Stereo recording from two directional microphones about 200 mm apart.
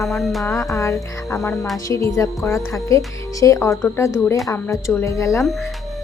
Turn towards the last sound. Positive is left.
turn(degrees=15)  # may be behind; listen again after turning